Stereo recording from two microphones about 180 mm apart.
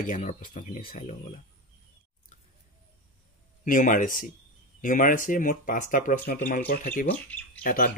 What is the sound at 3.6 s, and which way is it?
Speech, 45° left (ahead or behind).